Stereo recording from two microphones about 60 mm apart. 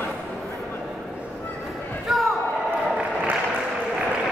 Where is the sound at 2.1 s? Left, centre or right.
Centre.